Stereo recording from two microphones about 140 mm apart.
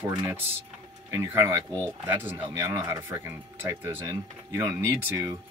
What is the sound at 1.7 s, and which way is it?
Speech, 15° left (ahead or behind).